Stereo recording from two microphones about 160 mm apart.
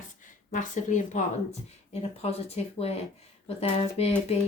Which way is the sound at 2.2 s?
40° left (ahead or behind).